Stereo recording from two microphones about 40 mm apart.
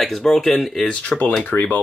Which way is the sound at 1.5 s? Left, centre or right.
Left.